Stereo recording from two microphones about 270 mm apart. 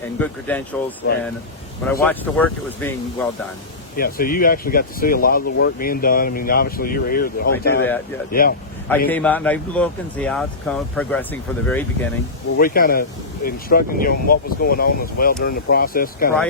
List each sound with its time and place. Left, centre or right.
0.2 s speech: centre
3.9 s speech: left
9.0 s speech: centre
12.5 s speech: left